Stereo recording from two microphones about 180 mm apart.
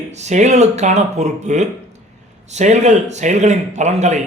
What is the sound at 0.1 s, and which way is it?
A man's voice, 40° right (ahead or behind).